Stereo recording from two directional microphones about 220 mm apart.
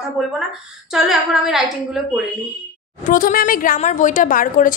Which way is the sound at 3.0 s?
40° left (ahead or behind).